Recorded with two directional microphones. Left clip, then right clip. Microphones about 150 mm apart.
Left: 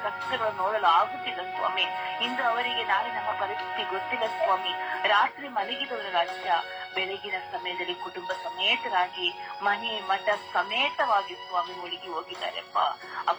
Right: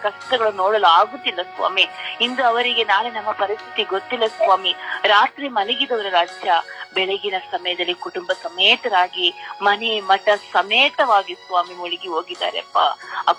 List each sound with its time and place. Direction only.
0.0 s a woman's voice: 70° right (ahead or behind)